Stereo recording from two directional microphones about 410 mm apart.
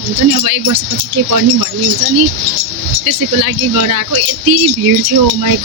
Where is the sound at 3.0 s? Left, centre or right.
Right.